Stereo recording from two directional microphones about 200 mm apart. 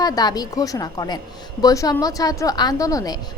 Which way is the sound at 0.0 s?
20° left (ahead or behind).